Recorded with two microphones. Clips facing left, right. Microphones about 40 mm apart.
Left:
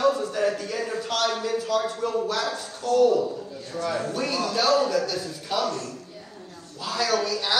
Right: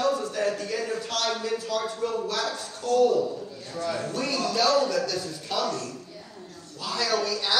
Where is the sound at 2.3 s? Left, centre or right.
Left.